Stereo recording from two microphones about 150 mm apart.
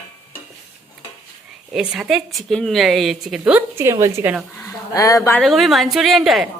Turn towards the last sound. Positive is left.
turn(degrees=0)  # may be behind; listen again after turning